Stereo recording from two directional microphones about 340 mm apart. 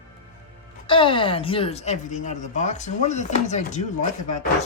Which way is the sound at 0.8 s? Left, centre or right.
Centre.